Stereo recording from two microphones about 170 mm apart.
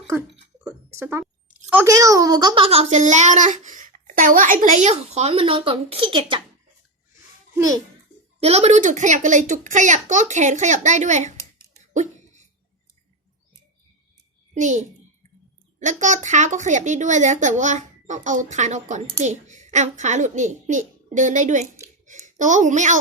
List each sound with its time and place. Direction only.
0.9 s a child's voice: 15° right (ahead or behind)
8.4 s speech: 40° right (ahead or behind)
11.9 s a sound: 45° right (ahead or behind)
14.5 s a child's voice: 45° right (ahead or behind)